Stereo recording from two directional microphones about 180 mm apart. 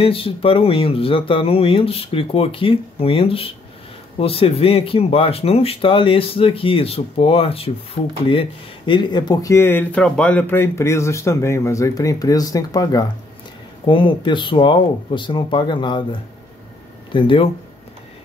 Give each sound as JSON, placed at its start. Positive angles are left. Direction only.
{"t": 0.0, "sound": "speech", "side_deg": 30}